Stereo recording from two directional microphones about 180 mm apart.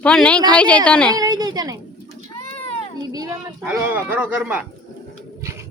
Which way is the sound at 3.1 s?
20° right (ahead or behind).